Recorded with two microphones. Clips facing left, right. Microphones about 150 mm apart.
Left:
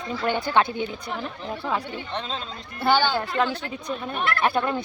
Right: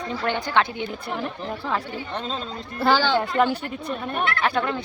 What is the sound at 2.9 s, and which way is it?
Speech, 90° right.